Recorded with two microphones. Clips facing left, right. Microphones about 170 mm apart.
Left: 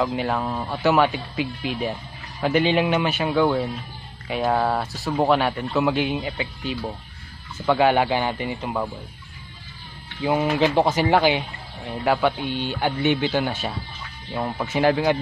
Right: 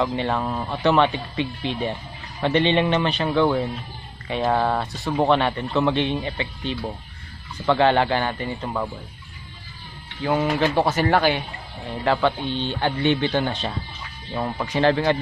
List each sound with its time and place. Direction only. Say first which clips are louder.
0.0 s a man's voice: even; 5° left (ahead or behind)
10.2 s a man's voice: left 1 dB; 20° left (ahead or behind)